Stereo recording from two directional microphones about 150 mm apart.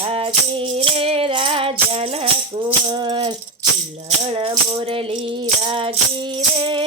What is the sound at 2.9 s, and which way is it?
Rattle, 30° right (ahead or behind).